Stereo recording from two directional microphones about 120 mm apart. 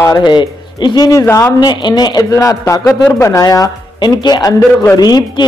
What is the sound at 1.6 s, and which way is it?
A man's voice, 35° left (ahead or behind).